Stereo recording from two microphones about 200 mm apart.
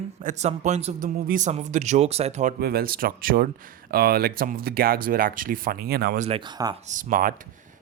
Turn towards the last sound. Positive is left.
turn(degrees=-45)  # may be behind; listen again after turning